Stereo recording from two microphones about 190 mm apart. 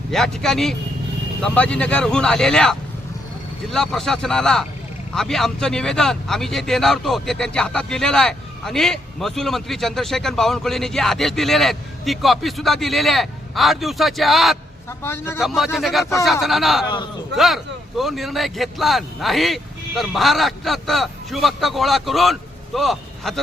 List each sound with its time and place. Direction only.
0.1 s a man's voice: centre (ahead or behind)
15.0 s a man's voice: 10° left (ahead or behind)
15.4 s a man's voice: centre (ahead or behind)
16.8 s a man's voice: 20° left (ahead or behind)
17.3 s a man's voice: centre (ahead or behind)